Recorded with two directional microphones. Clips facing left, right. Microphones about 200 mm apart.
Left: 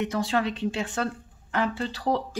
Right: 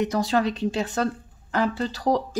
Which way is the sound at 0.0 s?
40° right (ahead or behind).